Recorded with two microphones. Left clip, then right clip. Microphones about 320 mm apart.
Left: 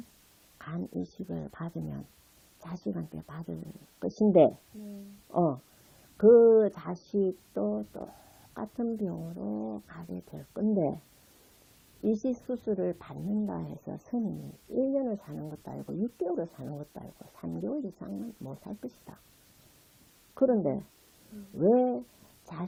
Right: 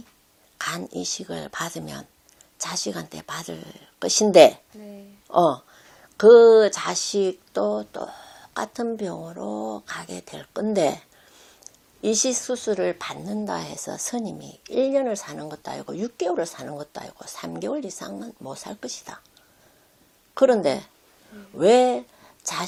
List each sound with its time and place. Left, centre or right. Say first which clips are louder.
1.1 s speech: right 10 dB; centre
12.0 s speech: right 8 dB; right
12.6 s speech: right 7 dB; centre
13.1 s speech: right 7 dB; right
20.3 s speech: right 9 dB; centre